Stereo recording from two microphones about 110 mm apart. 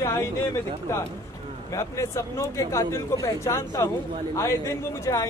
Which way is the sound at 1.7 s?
30° left (ahead or behind).